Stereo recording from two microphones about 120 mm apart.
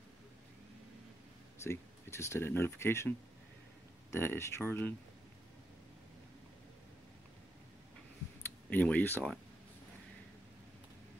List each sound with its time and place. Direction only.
1.6 s speech: 20° left (ahead or behind)
8.6 s speech: 10° left (ahead or behind)